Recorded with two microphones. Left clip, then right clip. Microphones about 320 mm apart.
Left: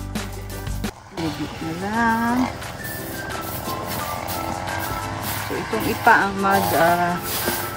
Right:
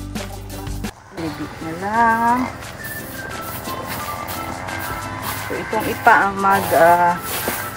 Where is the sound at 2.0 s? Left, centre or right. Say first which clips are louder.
Right 5 dB; left.